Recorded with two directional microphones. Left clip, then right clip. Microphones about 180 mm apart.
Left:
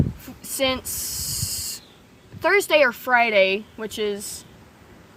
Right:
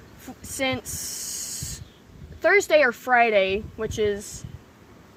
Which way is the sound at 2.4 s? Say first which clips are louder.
Left 1 dB; 25° left (ahead or behind).